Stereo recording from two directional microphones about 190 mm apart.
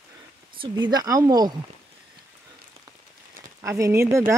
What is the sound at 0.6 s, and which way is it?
Speech, 20° right (ahead or behind).